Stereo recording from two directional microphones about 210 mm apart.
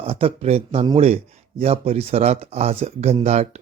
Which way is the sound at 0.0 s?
25° right (ahead or behind).